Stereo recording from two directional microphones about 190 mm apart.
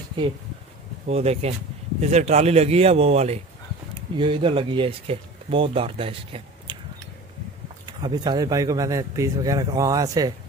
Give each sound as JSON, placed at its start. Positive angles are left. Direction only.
{"t": 1.0, "sound": "a man's voice", "side_deg": -35}
{"t": 8.0, "sound": "speech", "side_deg": -20}